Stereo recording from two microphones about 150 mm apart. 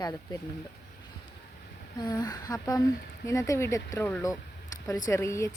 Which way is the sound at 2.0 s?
25° left (ahead or behind).